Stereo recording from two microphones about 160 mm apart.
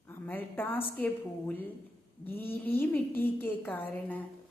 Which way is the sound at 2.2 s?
15° left (ahead or behind).